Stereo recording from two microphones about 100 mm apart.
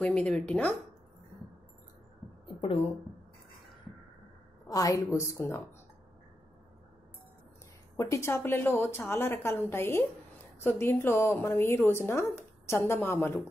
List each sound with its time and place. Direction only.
0.0 s speech: 10° left (ahead or behind)
2.4 s a sound: 60° left (ahead or behind)
4.6 s a woman's voice: 35° left (ahead or behind)
8.0 s a woman's voice: 25° left (ahead or behind)